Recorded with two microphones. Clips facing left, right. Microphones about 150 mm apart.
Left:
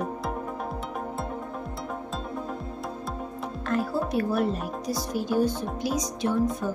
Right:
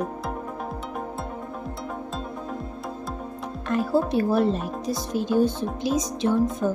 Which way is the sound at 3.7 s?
20° right (ahead or behind).